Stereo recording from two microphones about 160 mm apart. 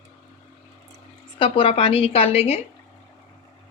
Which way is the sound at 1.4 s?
35° left (ahead or behind).